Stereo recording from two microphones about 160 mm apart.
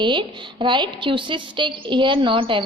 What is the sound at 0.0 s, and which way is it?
A woman's voice, 30° right (ahead or behind).